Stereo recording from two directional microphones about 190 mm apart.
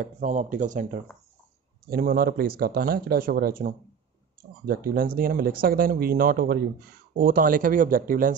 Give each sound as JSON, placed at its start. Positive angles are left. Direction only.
{"t": 0.0, "sound": "speech", "side_deg": -40}
{"t": 1.9, "sound": "speech", "side_deg": -50}